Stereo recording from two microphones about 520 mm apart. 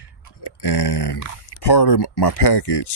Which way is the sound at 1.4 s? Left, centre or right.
Left.